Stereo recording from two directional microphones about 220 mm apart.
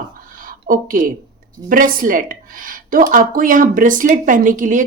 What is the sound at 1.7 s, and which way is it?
Speech, 40° right (ahead or behind).